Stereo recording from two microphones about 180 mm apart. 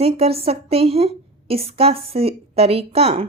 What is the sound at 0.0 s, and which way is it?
A woman's voice, 35° right (ahead or behind).